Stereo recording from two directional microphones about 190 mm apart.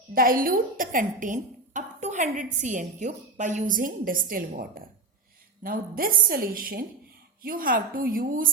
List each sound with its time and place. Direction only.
0.1 s a woman's voice: 50° right (ahead or behind)